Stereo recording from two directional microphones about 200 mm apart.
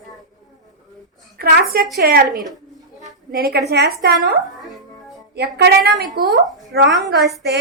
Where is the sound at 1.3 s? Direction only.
50° right (ahead or behind).